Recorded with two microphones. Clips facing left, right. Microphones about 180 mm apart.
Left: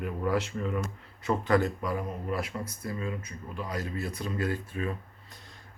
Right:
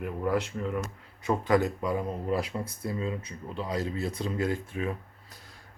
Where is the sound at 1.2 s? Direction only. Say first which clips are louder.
Right 1 dB; 15° right (ahead or behind).